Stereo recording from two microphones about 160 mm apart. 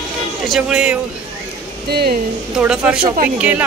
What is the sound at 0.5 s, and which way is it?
Speech, 5° right (ahead or behind).